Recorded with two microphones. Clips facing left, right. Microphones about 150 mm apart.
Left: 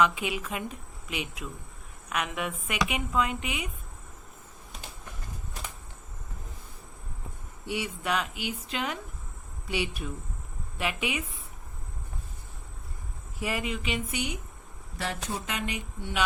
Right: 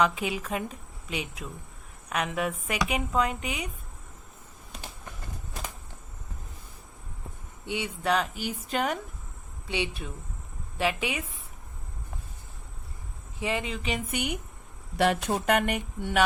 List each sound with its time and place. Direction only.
0.0 s speech: 35° right (ahead or behind)
7.7 s speech: 30° right (ahead or behind); by 9.0 s 45° right (ahead or behind)
9.6 s speech: 25° right (ahead or behind)
13.4 s speech: 25° right (ahead or behind)
13.8 s speech: 50° right (ahead or behind)
14.9 s speech: 70° right (ahead or behind); by 16.2 s 50° right (ahead or behind)